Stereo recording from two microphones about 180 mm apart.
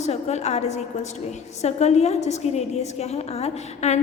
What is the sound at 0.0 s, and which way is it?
A woman's voice, 40° left (ahead or behind).